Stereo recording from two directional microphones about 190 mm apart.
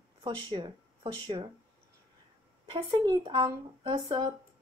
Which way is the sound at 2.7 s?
25° right (ahead or behind).